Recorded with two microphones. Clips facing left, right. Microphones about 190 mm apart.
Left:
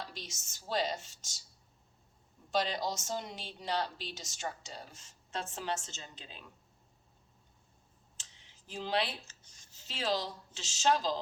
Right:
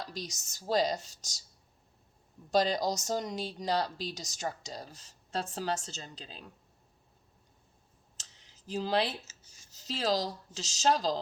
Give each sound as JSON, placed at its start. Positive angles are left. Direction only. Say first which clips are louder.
{"t": 0.0, "sound": "speech", "louder": "right 5 dB", "side_deg": -40}
{"t": 2.5, "sound": "speech", "louder": "right 5 dB", "side_deg": -40}
{"t": 8.1, "sound": "a sound", "louder": "right 2 dB", "side_deg": -40}
{"t": 9.2, "sound": "speech", "louder": "right 1 dB", "side_deg": -10}
{"t": 9.7, "sound": "speech", "louder": "right 4 dB", "side_deg": -40}